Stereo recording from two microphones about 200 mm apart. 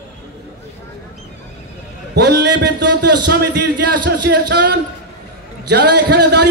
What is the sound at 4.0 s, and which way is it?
A man's voice, 60° right (ahead or behind).